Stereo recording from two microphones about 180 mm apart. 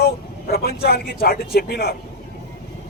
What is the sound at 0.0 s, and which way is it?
Speech, 60° left (ahead or behind).